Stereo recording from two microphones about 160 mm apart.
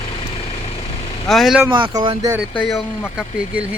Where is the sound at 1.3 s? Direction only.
Centre (ahead or behind).